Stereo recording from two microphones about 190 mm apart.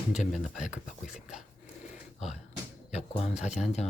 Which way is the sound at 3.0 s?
35° left (ahead or behind).